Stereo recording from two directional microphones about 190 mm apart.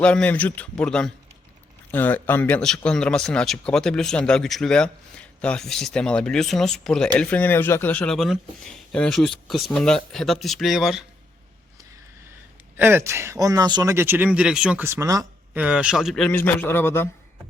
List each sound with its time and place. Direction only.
0.0 s speech: 5° left (ahead or behind)
12.7 s speech: 10° right (ahead or behind)
15.6 s speech: 5° right (ahead or behind); by 17.1 s 10° left (ahead or behind)